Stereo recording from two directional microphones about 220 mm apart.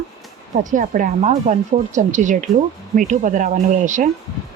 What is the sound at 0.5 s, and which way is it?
Speech, 35° right (ahead or behind).